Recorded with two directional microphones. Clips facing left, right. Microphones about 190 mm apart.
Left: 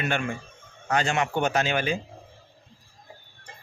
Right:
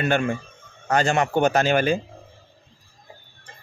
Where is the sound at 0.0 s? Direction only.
40° right (ahead or behind).